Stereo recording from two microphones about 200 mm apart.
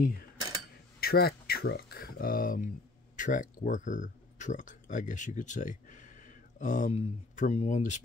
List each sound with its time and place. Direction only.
1.0 s speech: 50° left (ahead or behind)